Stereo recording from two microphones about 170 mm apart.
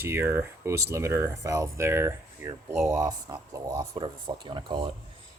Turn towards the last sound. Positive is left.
turn(degrees=-25)  # may be behind; listen again after turning